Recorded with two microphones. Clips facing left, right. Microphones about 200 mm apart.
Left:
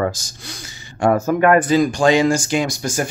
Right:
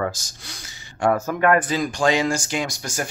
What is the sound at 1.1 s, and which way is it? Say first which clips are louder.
Speech: left 4 dB; 15° left (ahead or behind).